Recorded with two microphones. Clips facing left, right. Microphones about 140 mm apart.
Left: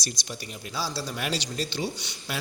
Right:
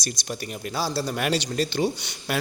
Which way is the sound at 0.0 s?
50° right (ahead or behind).